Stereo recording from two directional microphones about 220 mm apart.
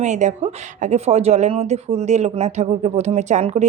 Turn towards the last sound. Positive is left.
turn(degrees=-30)  # may be behind; listen again after turning